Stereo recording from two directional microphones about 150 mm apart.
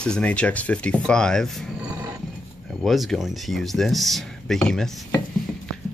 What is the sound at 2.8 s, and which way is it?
Speech, centre (ahead or behind).